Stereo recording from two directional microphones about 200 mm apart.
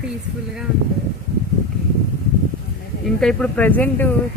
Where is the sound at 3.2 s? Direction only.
5° left (ahead or behind).